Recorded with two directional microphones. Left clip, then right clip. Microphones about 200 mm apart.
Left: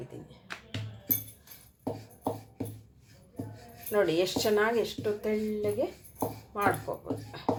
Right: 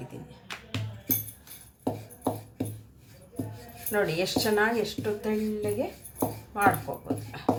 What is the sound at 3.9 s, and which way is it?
Speech, 25° left (ahead or behind).